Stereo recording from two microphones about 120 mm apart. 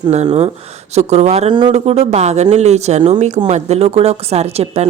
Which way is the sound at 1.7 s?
60° right (ahead or behind).